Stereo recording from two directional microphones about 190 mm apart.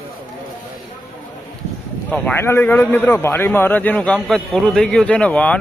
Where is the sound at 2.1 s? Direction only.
10° left (ahead or behind).